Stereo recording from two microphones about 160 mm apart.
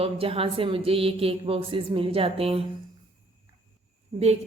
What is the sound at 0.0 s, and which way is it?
A woman's voice, 35° right (ahead or behind).